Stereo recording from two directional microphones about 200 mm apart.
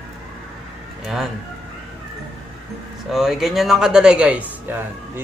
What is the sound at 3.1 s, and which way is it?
Speech, centre (ahead or behind).